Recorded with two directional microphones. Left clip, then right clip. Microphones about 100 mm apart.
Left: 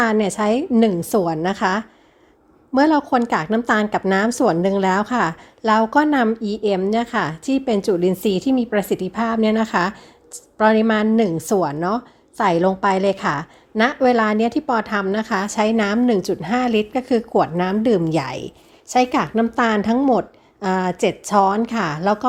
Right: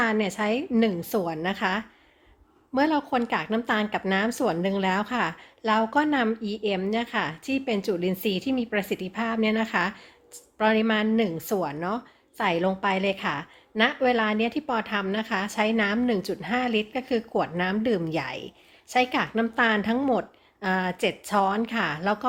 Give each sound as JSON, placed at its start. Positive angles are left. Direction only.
{"t": 0.0, "sound": "a woman's voice", "side_deg": 35}